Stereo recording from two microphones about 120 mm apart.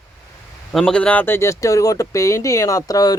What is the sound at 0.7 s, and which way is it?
Speech, centre (ahead or behind).